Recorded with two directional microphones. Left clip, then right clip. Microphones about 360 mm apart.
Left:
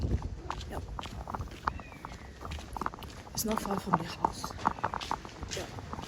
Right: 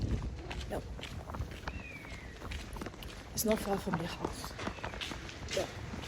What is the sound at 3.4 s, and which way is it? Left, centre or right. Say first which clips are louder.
Speech: right 1 dB; centre.